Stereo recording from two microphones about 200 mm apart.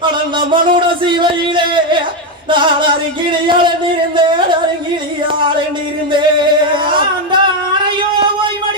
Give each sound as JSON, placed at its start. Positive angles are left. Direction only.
{"t": 0.0, "sound": "a sound", "side_deg": -25}
{"t": 2.5, "sound": "singing", "side_deg": -25}
{"t": 6.1, "sound": "music", "side_deg": -25}